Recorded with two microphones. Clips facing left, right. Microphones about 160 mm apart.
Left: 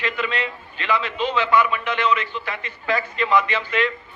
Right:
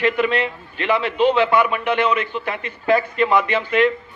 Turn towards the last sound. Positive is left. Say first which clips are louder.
# right 6 dB
turn(degrees=-55)  # may be behind; listen again after turning